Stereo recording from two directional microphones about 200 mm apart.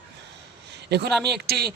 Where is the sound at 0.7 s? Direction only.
55° right (ahead or behind).